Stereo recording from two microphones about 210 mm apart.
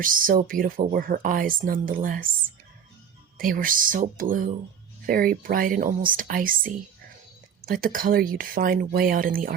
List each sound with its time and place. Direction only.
0.0 s speech: 40° right (ahead or behind)
3.3 s speech: 40° right (ahead or behind)